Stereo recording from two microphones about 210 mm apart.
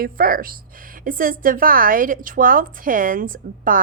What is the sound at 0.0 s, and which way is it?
A woman's voice, 45° right (ahead or behind).